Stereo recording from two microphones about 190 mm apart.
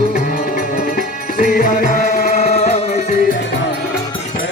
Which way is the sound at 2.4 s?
35° left (ahead or behind).